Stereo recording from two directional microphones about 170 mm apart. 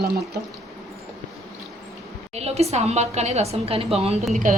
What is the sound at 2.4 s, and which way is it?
A woman's voice, 40° right (ahead or behind).